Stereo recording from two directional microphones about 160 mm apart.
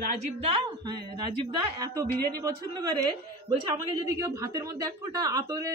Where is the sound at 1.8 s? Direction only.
20° right (ahead or behind).